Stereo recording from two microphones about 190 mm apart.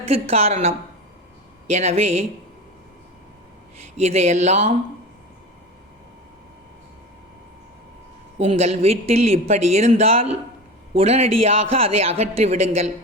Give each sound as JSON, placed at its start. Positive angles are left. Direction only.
{"t": 0.1, "sound": "speech", "side_deg": -30}
{"t": 1.7, "sound": "speech", "side_deg": -35}
{"t": 3.9, "sound": "speech", "side_deg": -35}
{"t": 8.4, "sound": "speech", "side_deg": -30}